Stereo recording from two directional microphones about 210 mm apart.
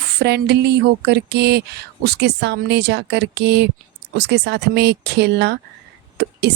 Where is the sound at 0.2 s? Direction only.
50° right (ahead or behind).